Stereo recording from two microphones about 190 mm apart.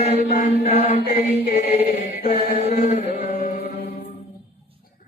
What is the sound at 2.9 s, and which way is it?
Chant, 35° left (ahead or behind).